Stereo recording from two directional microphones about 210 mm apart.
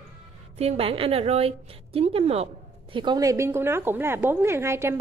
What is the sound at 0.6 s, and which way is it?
A woman's voice, 30° right (ahead or behind).